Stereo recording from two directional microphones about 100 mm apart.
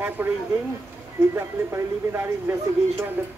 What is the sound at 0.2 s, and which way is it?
Speech, 20° right (ahead or behind).